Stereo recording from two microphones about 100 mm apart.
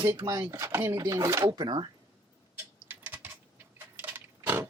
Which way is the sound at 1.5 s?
50° right (ahead or behind).